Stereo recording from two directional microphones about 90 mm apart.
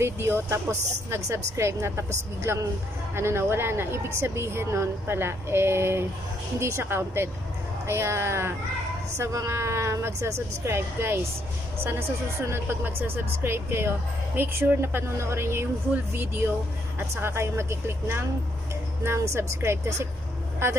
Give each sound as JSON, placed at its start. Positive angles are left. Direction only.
{"t": 0.0, "sound": "a woman's voice", "side_deg": -30}